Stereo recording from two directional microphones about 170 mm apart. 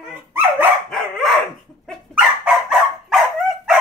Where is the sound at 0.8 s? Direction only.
Centre (ahead or behind).